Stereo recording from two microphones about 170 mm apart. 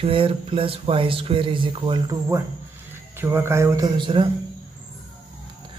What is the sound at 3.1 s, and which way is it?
Speech, 15° right (ahead or behind).